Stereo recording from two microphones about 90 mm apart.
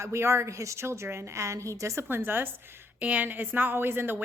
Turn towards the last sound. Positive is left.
turn(degrees=-25)  # may be behind; listen again after turning